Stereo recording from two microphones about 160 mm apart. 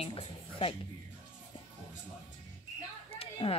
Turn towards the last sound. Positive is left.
turn(degrees=35)  # may be behind; listen again after turning